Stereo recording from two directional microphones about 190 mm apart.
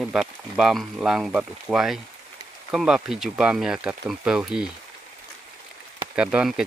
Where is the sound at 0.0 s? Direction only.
5° right (ahead or behind).